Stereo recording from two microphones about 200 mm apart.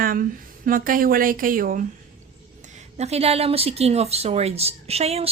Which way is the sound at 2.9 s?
30° right (ahead or behind).